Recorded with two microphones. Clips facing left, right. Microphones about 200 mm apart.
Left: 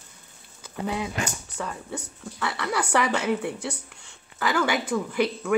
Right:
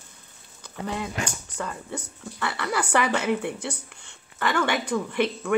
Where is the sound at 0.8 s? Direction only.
5° left (ahead or behind).